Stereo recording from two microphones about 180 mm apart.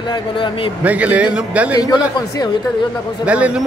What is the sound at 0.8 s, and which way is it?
Speech, 5° right (ahead or behind).